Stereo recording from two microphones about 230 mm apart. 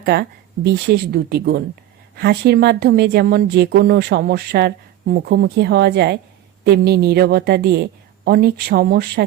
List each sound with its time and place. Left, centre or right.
0.0 s speech: right